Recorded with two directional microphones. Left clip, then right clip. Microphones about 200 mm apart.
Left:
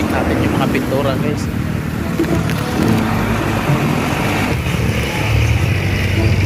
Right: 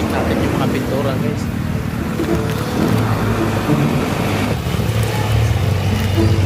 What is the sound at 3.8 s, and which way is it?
Vehicle, 50° right (ahead or behind).